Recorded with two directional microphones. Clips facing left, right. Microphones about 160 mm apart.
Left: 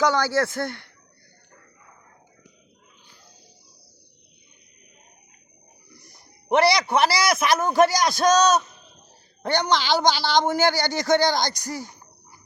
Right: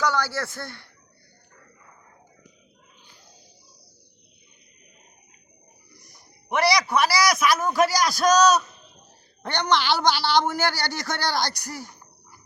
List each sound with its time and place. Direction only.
0.0 s a woman's voice: 20° left (ahead or behind)
6.1 s a man's voice: 25° left (ahead or behind)
9.4 s a woman's voice: 10° left (ahead or behind)
11.7 s a sound: 15° left (ahead or behind)